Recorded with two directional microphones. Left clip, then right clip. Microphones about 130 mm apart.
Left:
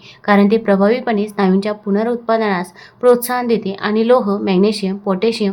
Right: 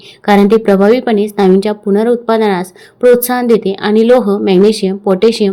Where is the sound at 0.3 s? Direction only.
30° right (ahead or behind).